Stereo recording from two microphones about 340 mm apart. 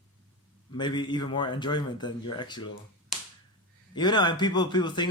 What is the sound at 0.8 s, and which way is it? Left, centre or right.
Speech, centre.